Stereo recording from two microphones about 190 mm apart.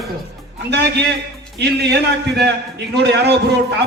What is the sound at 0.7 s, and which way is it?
A man's voice, 60° right (ahead or behind).